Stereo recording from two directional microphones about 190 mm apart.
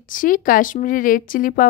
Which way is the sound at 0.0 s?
45° left (ahead or behind).